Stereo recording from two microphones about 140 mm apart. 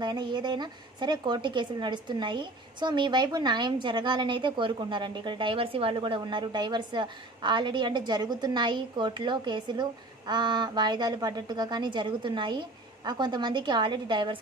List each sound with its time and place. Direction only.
0.0 s a woman's voice: 35° right (ahead or behind)